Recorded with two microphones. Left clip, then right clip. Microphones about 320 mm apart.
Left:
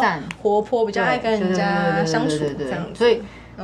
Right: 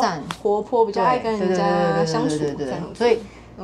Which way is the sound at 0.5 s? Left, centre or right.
Left.